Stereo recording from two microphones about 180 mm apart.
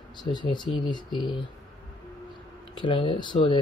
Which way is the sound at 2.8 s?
30° left (ahead or behind).